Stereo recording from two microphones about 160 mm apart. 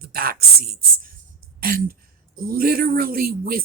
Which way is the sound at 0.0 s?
70° right (ahead or behind).